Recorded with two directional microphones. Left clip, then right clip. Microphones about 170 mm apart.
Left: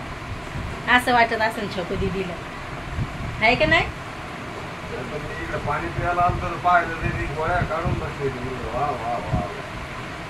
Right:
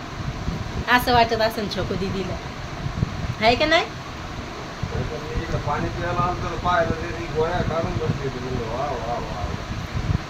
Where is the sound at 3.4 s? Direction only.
20° right (ahead or behind).